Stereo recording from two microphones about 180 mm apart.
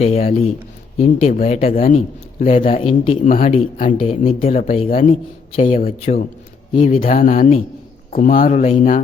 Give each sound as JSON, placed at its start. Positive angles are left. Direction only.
{"t": 0.0, "sound": "a man's voice", "side_deg": 35}
{"t": 5.8, "sound": "speech", "side_deg": 50}
{"t": 6.7, "sound": "a man's voice", "side_deg": 35}
{"t": 7.2, "sound": "speech", "side_deg": 50}